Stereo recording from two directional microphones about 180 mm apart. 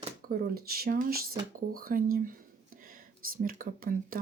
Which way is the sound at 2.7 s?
50° right (ahead or behind).